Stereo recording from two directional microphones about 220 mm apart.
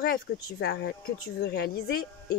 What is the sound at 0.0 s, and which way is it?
Speech, 45° left (ahead or behind).